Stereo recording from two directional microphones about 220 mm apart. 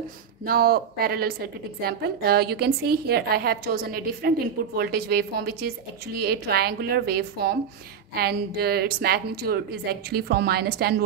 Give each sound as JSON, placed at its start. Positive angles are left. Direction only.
{"t": 0.5, "sound": "a woman's voice", "side_deg": -40}